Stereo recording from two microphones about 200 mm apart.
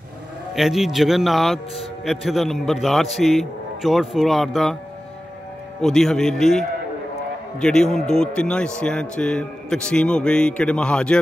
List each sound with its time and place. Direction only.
0.6 s a man's voice: centre (ahead or behind)
5.8 s a man's voice: centre (ahead or behind)
7.6 s a man's voice: 5° left (ahead or behind)